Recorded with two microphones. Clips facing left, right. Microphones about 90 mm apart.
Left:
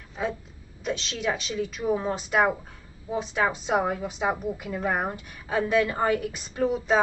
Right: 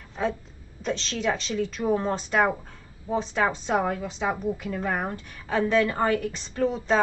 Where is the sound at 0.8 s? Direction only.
5° left (ahead or behind).